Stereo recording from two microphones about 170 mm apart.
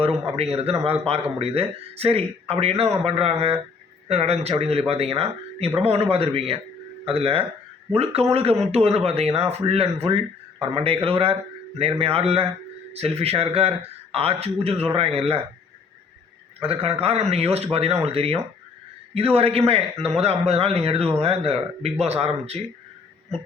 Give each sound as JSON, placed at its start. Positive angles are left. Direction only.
{"t": 0.3, "sound": "speech", "side_deg": -35}
{"t": 16.6, "sound": "speech", "side_deg": -35}